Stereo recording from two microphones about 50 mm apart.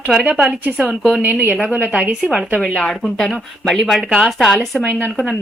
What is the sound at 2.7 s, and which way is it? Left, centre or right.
Speech, centre.